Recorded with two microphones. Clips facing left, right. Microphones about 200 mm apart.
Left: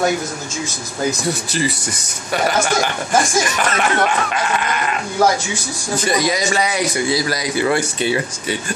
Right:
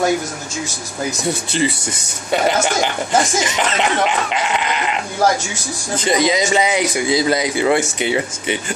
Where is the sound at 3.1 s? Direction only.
20° right (ahead or behind).